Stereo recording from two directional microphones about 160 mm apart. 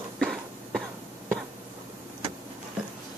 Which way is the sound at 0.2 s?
Centre (ahead or behind).